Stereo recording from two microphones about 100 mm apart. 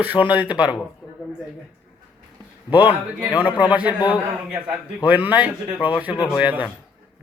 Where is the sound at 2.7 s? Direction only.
15° right (ahead or behind).